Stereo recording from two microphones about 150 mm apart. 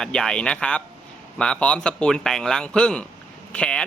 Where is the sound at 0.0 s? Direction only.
5° left (ahead or behind).